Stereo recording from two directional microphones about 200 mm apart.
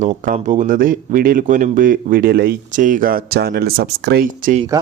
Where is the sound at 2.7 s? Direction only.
40° right (ahead or behind).